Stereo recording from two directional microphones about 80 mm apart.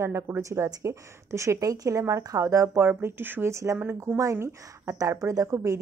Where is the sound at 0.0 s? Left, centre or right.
Right.